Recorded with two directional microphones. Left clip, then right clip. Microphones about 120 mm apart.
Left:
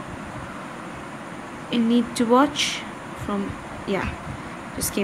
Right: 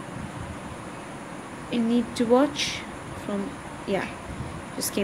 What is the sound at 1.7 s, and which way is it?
Speech, 15° left (ahead or behind).